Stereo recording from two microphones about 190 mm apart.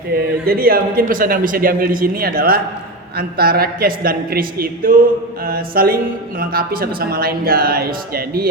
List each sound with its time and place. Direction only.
0.1 s a man's voice: 50° right (ahead or behind)